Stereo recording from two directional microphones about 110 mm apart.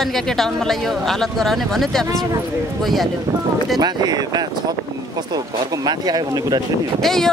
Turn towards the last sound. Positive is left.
turn(degrees=5)  # may be behind; listen again after turning